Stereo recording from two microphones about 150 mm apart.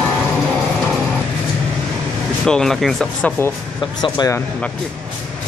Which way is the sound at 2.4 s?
5° left (ahead or behind).